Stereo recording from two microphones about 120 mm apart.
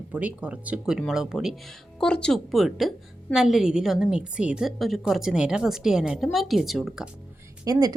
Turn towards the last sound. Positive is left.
turn(degrees=-30)  # may be behind; listen again after turning